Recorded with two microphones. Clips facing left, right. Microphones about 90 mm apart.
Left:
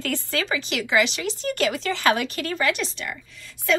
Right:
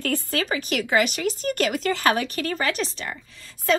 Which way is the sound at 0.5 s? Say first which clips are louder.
Right 2 dB; 45° right (ahead or behind).